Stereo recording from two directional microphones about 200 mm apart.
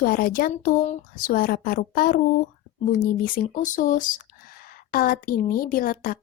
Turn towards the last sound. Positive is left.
turn(degrees=45)  # may be behind; listen again after turning